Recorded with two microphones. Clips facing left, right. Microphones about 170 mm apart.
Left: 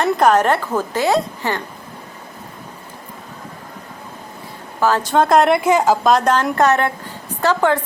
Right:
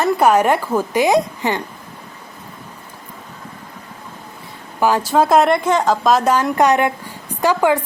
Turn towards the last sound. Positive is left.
turn(degrees=-10)  # may be behind; listen again after turning